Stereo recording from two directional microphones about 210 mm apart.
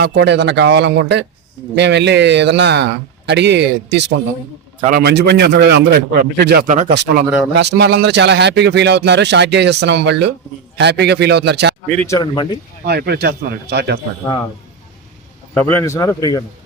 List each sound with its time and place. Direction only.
0.0 s speech: 55° right (ahead or behind)
4.8 s a man's voice: 45° right (ahead or behind)
7.5 s a man's voice: 55° right (ahead or behind)
12.0 s a man's voice: 15° left (ahead or behind)
12.8 s a man's voice: 50° right (ahead or behind)
15.5 s a man's voice: 10° left (ahead or behind)